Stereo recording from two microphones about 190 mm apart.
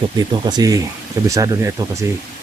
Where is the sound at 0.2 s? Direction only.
20° right (ahead or behind).